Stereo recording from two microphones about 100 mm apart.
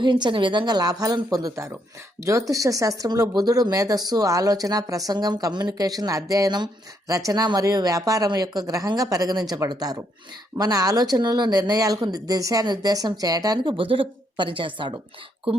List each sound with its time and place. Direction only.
0.0 s speech: 50° right (ahead or behind)
13.7 s a woman's voice: 60° right (ahead or behind)